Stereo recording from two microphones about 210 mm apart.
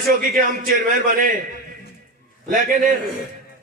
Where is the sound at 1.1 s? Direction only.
40° right (ahead or behind).